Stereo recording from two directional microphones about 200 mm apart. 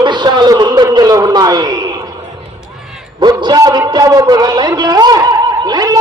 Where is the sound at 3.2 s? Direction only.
20° right (ahead or behind).